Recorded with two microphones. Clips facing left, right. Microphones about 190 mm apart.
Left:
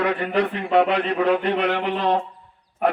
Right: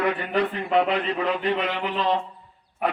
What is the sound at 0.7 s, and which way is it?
A man's voice, 65° left (ahead or behind).